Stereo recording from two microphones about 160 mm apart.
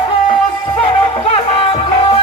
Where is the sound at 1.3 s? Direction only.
40° left (ahead or behind).